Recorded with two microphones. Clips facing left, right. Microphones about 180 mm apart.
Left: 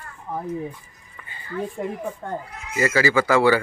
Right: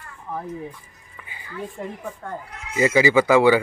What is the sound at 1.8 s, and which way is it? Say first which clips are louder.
Speech: left 4 dB; 10° left (ahead or behind).